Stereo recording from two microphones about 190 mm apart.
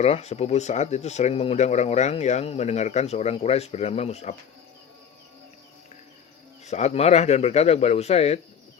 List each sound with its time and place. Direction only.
0.0 s speech: 35° left (ahead or behind)
6.7 s speech: 35° left (ahead or behind)